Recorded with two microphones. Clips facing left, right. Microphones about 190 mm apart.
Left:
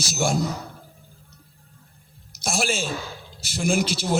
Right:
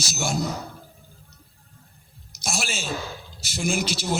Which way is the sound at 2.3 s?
55° left (ahead or behind).